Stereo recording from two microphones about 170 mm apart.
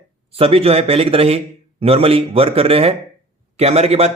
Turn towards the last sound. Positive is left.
turn(degrees=-40)  # may be behind; listen again after turning